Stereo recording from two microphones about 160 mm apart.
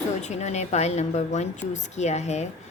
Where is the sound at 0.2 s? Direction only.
45° left (ahead or behind).